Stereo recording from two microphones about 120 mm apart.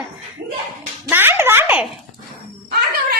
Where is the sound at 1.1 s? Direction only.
20° right (ahead or behind).